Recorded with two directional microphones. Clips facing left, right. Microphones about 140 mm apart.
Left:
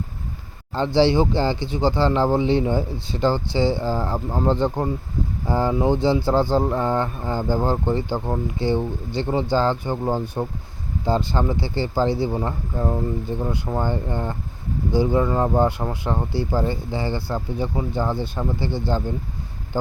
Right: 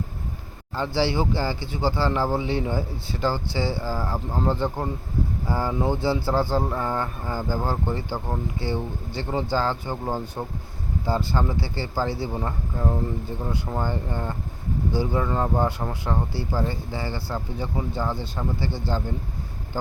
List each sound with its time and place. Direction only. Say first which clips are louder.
0.9 s speech: left 6 dB; 20° left (ahead or behind)